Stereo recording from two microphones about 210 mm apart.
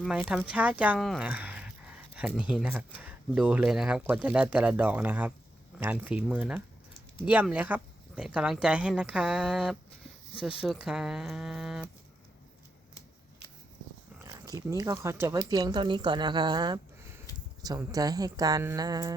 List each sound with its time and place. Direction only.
0.0 s speech: centre (ahead or behind)
14.3 s speech: 15° right (ahead or behind)